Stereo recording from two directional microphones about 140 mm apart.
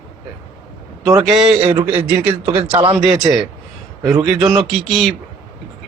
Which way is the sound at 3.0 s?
5° right (ahead or behind).